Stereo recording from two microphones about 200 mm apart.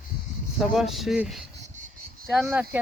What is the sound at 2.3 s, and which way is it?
Speech, 5° right (ahead or behind).